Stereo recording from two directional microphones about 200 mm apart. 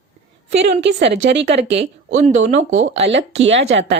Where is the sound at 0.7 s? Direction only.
60° right (ahead or behind).